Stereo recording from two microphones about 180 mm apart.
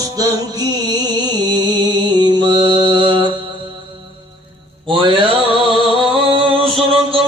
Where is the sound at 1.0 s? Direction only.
25° right (ahead or behind).